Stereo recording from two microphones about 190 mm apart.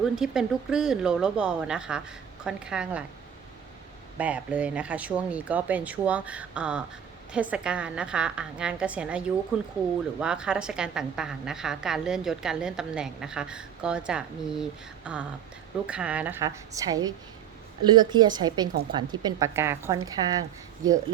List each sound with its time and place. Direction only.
0.0 s a woman's voice: 5° right (ahead or behind)
4.2 s a woman's voice: 5° right (ahead or behind)